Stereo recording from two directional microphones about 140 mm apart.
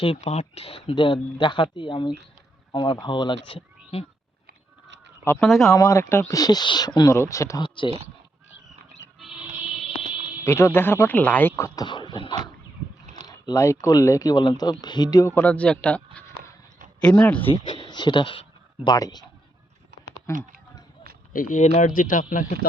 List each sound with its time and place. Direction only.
0.0 s speech: 45° left (ahead or behind)
5.2 s speech: 15° left (ahead or behind)
9.1 s music: centre (ahead or behind)
10.4 s speech: 20° left (ahead or behind)
11.9 s beatboxing: 35° left (ahead or behind)
13.2 s speech: 25° left (ahead or behind)
15.4 s speech: 10° left (ahead or behind)
17.4 s speech: 40° left (ahead or behind)
20.3 s speech: 20° left (ahead or behind)
21.3 s speech: 65° left (ahead or behind)